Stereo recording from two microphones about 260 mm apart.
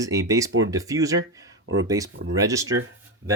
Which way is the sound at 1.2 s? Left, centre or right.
Right.